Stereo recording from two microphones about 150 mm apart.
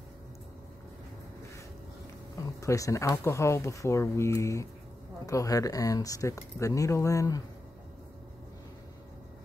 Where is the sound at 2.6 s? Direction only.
20° left (ahead or behind).